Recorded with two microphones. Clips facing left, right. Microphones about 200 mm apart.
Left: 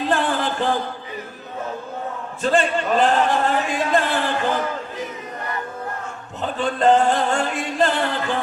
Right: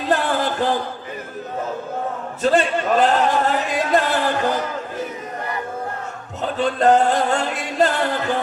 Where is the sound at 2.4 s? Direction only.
40° right (ahead or behind).